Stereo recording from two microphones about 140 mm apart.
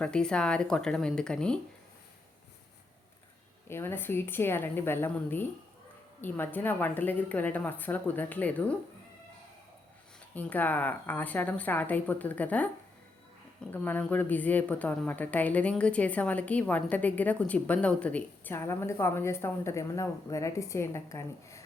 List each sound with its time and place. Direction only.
0.0 s speech: 5° left (ahead or behind)
3.7 s a woman's voice: 15° left (ahead or behind)
10.3 s a woman's voice: 10° left (ahead or behind)